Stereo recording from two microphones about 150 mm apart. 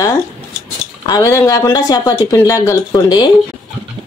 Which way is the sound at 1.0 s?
20° left (ahead or behind).